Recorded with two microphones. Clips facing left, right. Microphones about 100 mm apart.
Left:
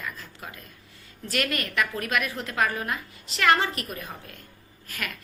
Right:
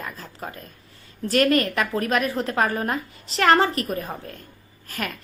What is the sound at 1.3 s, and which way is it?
A woman's voice, 35° right (ahead or behind).